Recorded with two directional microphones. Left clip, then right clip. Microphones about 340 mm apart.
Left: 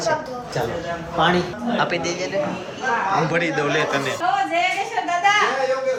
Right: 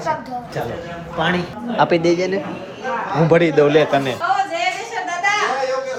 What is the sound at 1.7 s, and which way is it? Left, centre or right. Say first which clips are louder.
Chuckle: right 7 dB; centre.